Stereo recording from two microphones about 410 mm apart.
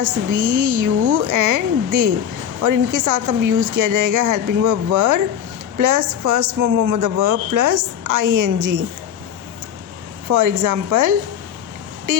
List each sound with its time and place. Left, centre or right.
0.0 s a woman's voice: right
10.2 s a woman's voice: right